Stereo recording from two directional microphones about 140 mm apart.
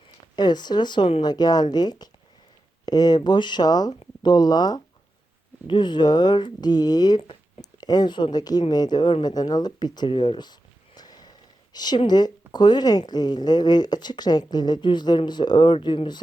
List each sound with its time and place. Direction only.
0.3 s a woman's voice: 30° left (ahead or behind)